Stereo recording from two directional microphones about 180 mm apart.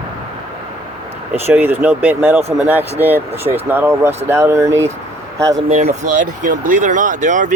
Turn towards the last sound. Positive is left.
turn(degrees=-45)  # may be behind; listen again after turning